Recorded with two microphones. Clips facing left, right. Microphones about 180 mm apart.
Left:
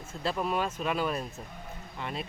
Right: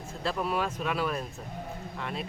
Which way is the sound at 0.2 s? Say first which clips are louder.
Even; centre (ahead or behind).